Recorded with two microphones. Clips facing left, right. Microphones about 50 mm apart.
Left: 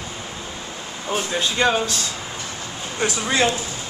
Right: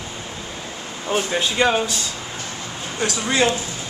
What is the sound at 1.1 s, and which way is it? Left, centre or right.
Speech, centre.